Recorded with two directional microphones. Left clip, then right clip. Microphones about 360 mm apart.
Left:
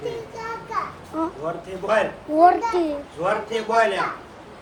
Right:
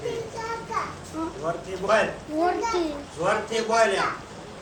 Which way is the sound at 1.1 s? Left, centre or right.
Centre.